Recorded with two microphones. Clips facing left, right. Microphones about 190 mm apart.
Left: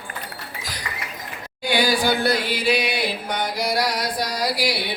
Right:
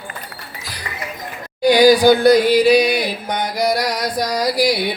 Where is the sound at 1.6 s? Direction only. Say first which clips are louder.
Right 10 dB; 40° right (ahead or behind).